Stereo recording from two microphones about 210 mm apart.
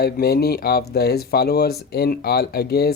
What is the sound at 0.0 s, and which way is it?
Speech, 50° left (ahead or behind).